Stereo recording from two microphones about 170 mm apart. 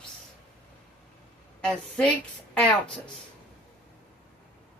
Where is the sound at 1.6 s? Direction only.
5° left (ahead or behind).